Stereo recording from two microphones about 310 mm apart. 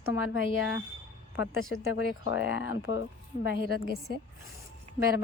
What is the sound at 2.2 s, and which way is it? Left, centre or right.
Speech, left.